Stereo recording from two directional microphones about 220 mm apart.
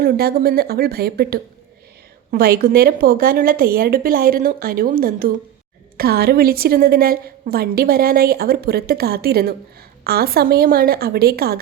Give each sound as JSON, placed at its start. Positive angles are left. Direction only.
{"t": 0.0, "sound": "a woman's voice", "side_deg": -45}